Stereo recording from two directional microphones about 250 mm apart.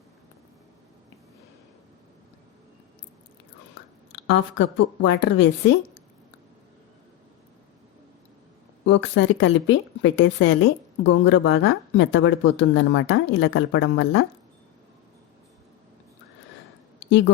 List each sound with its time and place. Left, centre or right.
4.1 s a woman's voice: left
8.8 s a woman's voice: left